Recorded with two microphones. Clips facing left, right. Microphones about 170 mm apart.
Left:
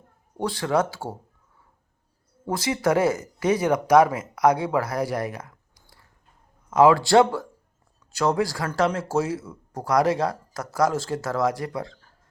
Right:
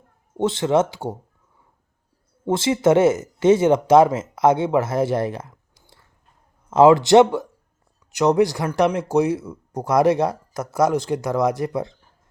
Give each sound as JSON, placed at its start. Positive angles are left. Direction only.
{"t": 0.3, "sound": "speech", "side_deg": -20}
{"t": 2.5, "sound": "speech", "side_deg": -25}